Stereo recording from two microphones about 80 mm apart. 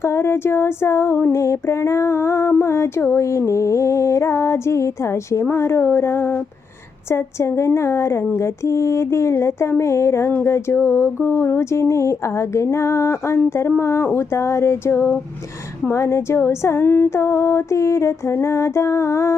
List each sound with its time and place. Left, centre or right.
0.0 s female singing: left